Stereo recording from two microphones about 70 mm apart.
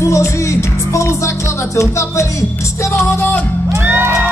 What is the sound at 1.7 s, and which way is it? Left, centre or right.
Music, left.